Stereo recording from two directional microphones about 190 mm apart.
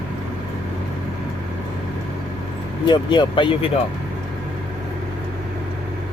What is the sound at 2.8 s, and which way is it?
Speech, 25° left (ahead or behind).